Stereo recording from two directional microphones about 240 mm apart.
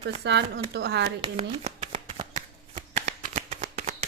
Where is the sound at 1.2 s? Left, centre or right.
Right.